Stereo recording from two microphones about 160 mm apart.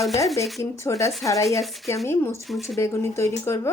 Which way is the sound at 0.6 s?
20° left (ahead or behind).